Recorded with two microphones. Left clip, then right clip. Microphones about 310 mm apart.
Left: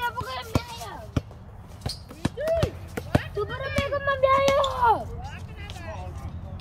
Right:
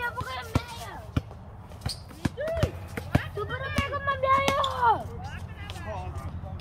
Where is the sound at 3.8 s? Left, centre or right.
Left.